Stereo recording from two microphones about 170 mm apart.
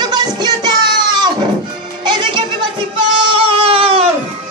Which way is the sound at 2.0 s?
25° right (ahead or behind).